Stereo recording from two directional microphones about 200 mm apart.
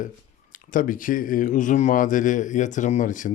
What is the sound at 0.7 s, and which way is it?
Speech, 40° left (ahead or behind).